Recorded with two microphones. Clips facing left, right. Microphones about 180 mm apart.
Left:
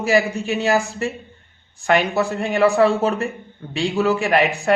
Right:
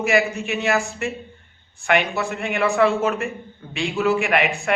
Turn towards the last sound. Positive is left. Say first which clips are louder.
# left 3 dB
turn(degrees=35)  # may be behind; listen again after turning